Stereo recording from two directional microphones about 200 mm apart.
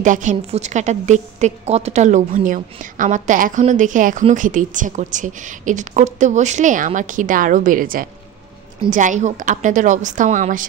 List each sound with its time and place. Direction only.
0.0 s a woman's voice: 40° right (ahead or behind)